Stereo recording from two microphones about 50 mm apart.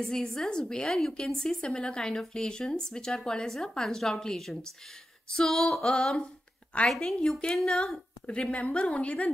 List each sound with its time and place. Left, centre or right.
0.0 s a woman's voice: centre
6.9 s a woman's voice: centre
8.3 s a woman's voice: left